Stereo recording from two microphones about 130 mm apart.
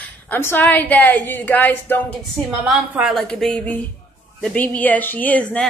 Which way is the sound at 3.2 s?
5° left (ahead or behind).